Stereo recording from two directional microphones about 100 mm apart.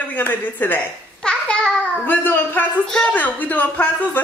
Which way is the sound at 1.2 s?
10° left (ahead or behind).